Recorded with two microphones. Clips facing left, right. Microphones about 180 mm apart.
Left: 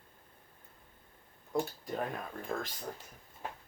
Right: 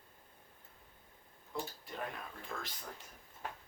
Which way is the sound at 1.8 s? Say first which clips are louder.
Left 7 dB; 45° left (ahead or behind).